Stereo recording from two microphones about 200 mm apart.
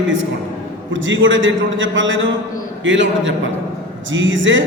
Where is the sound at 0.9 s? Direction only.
70° right (ahead or behind).